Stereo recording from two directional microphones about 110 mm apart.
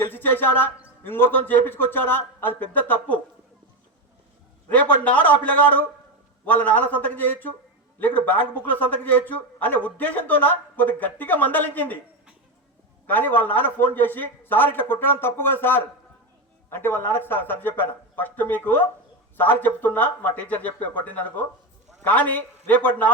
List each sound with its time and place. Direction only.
0.0 s a man's voice: 20° left (ahead or behind)
4.8 s a man's voice: 15° left (ahead or behind)
13.1 s a man's voice: 15° left (ahead or behind)